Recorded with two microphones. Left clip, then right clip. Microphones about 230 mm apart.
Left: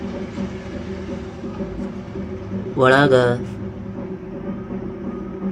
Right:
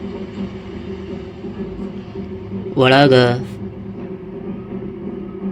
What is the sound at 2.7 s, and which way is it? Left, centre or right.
Speech, centre.